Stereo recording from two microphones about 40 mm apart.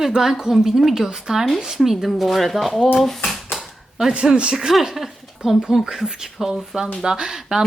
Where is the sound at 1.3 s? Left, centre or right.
Centre.